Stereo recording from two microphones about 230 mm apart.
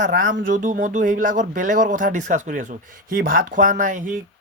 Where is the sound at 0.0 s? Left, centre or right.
Right.